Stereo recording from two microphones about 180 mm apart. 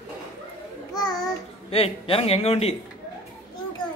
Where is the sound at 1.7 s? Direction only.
30° left (ahead or behind).